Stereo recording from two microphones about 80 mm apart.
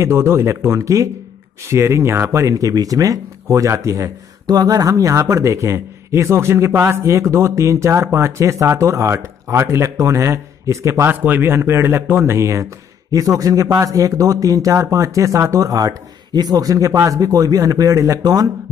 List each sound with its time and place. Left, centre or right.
0.0 s speech: right
2.4 s speech: right
4.5 s speech: right
11.1 s speech: right